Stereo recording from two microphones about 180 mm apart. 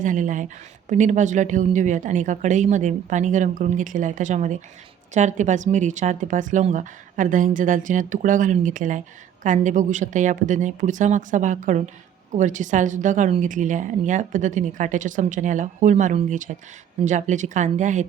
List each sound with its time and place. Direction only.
0.0 s a woman's voice: 45° right (ahead or behind)